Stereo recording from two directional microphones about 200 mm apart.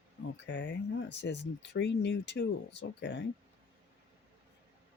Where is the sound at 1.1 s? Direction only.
60° left (ahead or behind).